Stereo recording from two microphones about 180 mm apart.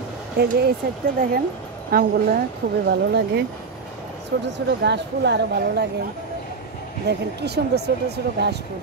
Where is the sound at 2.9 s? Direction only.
70° right (ahead or behind).